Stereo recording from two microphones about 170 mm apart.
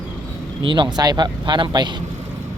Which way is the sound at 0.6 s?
30° right (ahead or behind).